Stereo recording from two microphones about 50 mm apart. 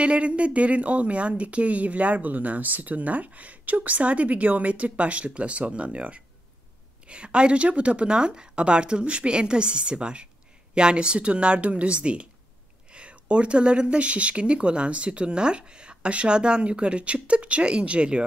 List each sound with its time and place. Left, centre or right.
0.0 s speech: right